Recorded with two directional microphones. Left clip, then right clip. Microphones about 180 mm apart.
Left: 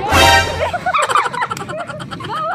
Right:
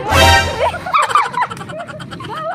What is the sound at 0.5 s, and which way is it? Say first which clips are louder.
Music: right 2 dB; 25° right (ahead or behind).